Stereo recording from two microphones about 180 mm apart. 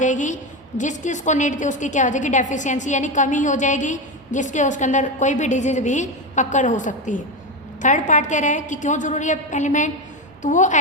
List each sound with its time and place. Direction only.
0.0 s a woman's voice: 45° left (ahead or behind)